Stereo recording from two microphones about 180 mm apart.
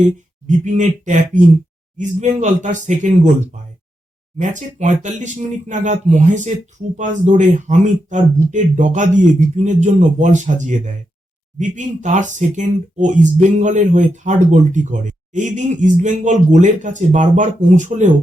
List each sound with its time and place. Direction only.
0.0 s speech: 40° right (ahead or behind)
4.4 s speech: 45° right (ahead or behind)